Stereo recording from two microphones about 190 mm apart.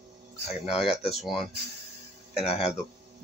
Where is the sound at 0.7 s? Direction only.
Centre (ahead or behind).